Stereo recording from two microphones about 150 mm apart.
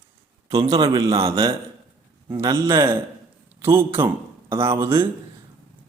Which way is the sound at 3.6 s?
15° right (ahead or behind).